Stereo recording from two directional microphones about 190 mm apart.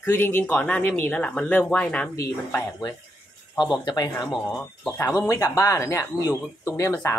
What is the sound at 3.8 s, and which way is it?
Speech, 20° left (ahead or behind).